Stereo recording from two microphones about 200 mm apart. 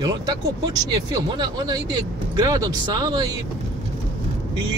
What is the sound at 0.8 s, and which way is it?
Speech, 20° right (ahead or behind).